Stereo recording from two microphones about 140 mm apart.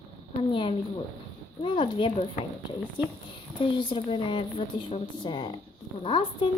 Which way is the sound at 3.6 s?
35° left (ahead or behind).